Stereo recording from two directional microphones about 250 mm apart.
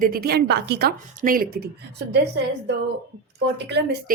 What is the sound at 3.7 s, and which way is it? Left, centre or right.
Speech, right.